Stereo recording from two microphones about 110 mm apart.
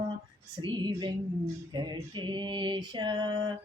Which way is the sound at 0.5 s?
45° right (ahead or behind).